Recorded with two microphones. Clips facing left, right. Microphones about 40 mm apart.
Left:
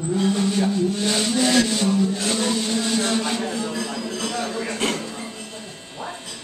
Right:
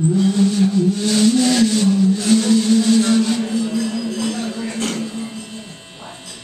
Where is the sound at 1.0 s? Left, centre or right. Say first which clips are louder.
Right 7 dB; centre.